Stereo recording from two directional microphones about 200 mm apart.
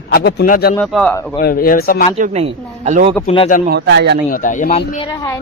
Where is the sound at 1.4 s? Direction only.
45° left (ahead or behind).